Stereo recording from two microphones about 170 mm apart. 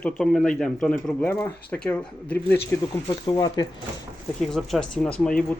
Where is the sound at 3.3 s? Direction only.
25° left (ahead or behind).